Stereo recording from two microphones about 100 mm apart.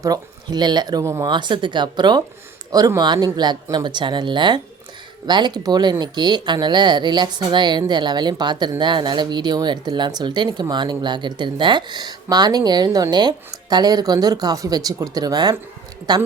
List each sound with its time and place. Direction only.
0.0 s speech: 40° right (ahead or behind)
2.7 s speech: 40° right (ahead or behind)